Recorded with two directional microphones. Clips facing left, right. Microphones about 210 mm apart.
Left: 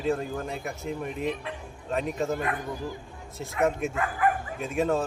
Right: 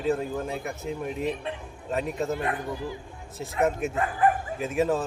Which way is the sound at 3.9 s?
30° right (ahead or behind).